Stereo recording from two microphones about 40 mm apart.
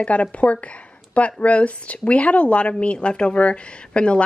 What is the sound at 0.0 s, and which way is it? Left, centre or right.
A woman's voice, left.